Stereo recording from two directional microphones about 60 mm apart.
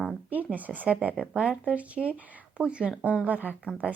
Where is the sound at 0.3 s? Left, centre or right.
Right.